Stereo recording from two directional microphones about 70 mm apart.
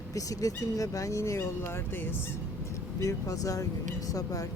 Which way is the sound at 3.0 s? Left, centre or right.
Left.